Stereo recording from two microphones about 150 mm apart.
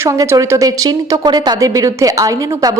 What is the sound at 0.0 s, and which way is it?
A woman's voice, 20° right (ahead or behind).